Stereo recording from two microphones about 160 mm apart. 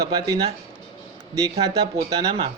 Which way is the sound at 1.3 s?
20° right (ahead or behind).